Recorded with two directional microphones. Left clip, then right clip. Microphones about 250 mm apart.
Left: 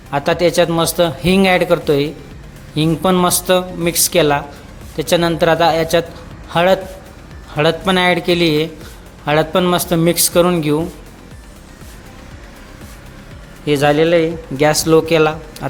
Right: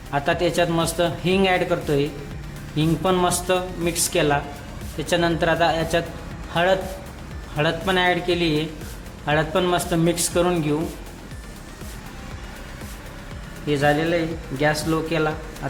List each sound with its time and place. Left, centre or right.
0.1 s a man's voice: left
13.7 s speech: left